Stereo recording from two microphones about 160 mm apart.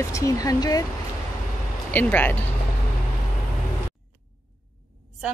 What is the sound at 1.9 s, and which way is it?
Speech, 10° left (ahead or behind).